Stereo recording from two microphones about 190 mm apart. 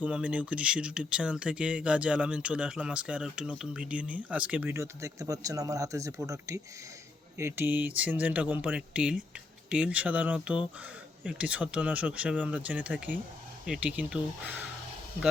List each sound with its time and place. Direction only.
0.0 s speech: 5° right (ahead or behind)